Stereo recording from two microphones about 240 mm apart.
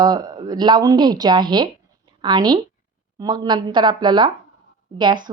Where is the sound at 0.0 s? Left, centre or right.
Centre.